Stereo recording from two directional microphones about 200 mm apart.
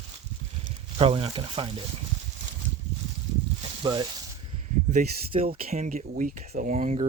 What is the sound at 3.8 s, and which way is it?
Speech, 20° right (ahead or behind).